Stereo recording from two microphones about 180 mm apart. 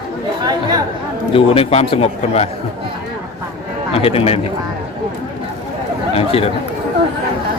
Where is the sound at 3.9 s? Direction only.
30° left (ahead or behind).